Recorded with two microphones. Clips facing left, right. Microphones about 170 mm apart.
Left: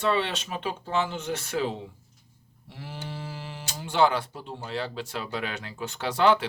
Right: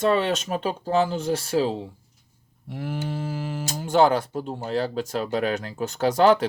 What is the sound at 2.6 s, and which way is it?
Speech, 50° right (ahead or behind).